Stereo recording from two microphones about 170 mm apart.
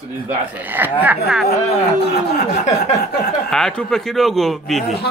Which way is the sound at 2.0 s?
70° left (ahead or behind).